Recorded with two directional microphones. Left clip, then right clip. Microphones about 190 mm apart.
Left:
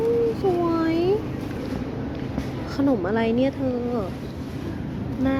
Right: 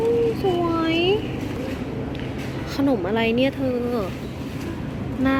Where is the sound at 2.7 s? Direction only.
5° left (ahead or behind).